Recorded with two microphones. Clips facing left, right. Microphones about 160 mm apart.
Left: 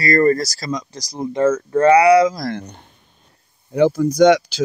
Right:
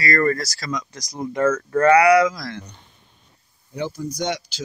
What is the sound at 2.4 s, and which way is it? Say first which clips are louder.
Speech: left 8 dB; 50° left (ahead or behind).